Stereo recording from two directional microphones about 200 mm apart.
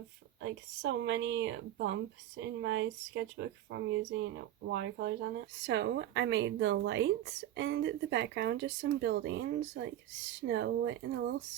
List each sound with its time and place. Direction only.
0.4 s speech: 65° right (ahead or behind)